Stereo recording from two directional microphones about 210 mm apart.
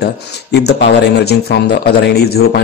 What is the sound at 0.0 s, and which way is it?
Speech, 50° left (ahead or behind).